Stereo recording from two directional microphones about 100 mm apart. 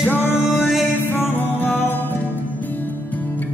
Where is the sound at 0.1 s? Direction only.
20° left (ahead or behind).